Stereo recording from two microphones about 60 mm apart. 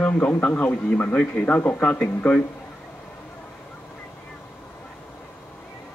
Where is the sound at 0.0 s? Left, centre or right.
Centre.